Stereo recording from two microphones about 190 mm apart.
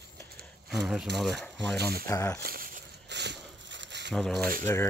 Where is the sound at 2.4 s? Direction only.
50° right (ahead or behind); by 4.1 s 70° right (ahead or behind).